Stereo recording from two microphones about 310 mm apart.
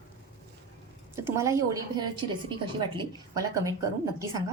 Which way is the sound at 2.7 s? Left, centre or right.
Centre.